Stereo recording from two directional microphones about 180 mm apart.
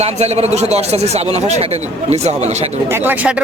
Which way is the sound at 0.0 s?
35° right (ahead or behind).